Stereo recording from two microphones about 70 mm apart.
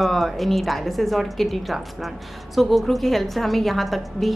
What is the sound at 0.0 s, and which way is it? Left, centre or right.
A woman's voice, centre.